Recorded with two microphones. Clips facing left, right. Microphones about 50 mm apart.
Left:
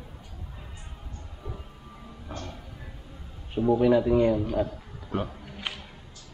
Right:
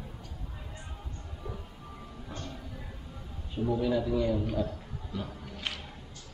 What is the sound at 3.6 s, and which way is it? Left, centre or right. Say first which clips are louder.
A man's voice: left 7 dB; left.